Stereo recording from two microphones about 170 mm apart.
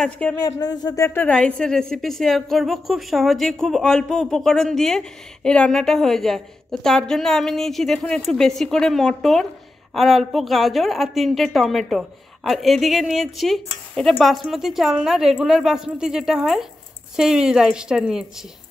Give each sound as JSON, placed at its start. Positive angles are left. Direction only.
{"t": 0.0, "sound": "speech", "side_deg": 10}
{"t": 0.4, "sound": "a woman's voice", "side_deg": 20}